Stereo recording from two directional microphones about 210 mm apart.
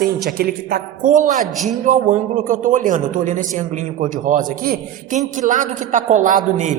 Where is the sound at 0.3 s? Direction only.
45° right (ahead or behind).